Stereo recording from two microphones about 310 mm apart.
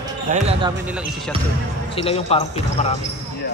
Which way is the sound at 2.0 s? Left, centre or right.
Centre.